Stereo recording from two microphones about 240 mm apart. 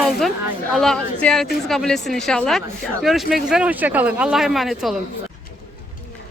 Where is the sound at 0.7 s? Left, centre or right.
Centre.